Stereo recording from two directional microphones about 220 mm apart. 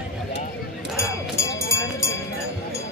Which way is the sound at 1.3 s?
10° left (ahead or behind).